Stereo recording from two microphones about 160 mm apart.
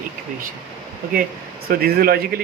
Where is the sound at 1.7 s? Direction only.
70° right (ahead or behind).